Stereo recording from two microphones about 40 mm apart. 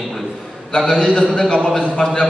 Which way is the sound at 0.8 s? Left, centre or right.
Centre.